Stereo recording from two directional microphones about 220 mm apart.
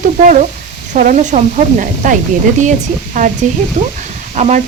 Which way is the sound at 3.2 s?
40° right (ahead or behind).